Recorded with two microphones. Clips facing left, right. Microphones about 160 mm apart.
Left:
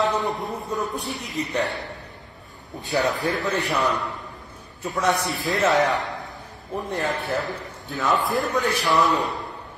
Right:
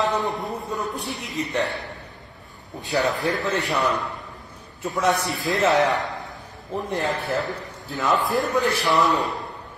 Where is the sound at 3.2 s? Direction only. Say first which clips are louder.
Right 1 dB; 20° right (ahead or behind).